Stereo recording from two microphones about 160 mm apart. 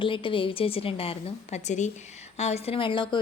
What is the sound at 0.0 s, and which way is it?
Speech, 30° left (ahead or behind).